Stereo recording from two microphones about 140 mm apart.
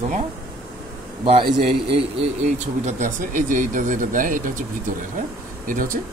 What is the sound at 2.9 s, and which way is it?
Speech, 65° right (ahead or behind).